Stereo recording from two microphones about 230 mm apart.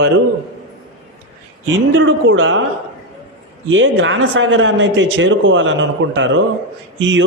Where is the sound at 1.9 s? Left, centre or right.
Right.